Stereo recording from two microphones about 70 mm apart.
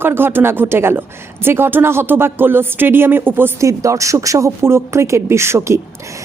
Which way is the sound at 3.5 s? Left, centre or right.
Right.